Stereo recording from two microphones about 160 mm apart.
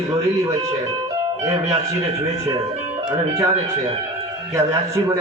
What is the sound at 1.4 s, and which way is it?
Speech, 20° right (ahead or behind).